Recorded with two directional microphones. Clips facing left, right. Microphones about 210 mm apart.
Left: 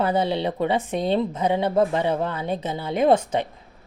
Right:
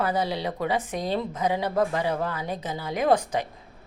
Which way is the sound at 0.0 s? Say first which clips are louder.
Left 4 dB; 25° left (ahead or behind).